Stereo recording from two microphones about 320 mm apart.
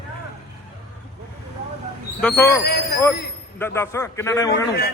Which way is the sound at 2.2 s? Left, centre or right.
Centre.